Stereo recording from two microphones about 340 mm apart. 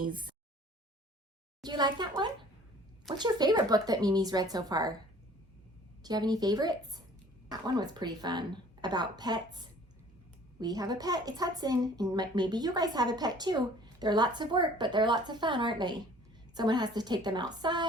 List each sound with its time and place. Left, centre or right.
0.0 s a sound: right
1.6 s a woman's voice: centre
6.0 s a woman's voice: centre
10.6 s a woman's voice: centre